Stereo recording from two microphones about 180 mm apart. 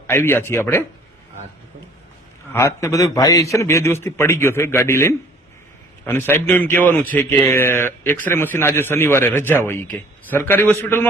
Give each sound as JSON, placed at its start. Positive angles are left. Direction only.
{"t": 0.1, "sound": "a man's voice", "side_deg": 15}
{"t": 2.5, "sound": "a man's voice", "side_deg": 15}